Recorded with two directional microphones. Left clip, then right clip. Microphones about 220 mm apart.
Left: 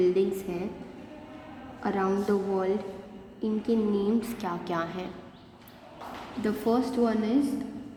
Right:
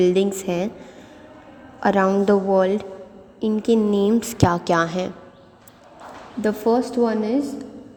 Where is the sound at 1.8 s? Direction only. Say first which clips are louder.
Right 10 dB; 40° right (ahead or behind).